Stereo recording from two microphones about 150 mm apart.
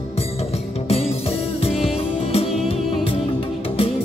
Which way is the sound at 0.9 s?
40° left (ahead or behind).